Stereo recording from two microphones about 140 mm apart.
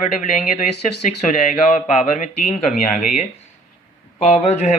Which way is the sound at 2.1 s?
60° left (ahead or behind).